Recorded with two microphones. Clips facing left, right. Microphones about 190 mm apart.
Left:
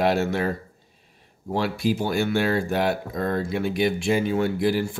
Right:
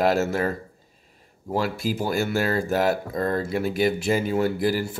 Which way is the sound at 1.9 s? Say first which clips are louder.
Left 1 dB; 5° right (ahead or behind).